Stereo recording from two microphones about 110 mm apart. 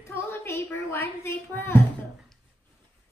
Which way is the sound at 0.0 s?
25° left (ahead or behind).